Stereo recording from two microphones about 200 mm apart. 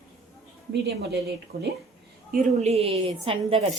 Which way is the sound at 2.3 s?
35° right (ahead or behind).